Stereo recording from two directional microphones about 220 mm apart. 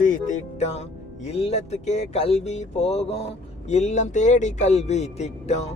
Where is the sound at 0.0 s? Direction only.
35° left (ahead or behind).